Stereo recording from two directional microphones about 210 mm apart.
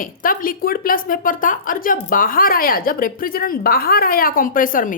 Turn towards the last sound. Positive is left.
turn(degrees=40)  # may be behind; listen again after turning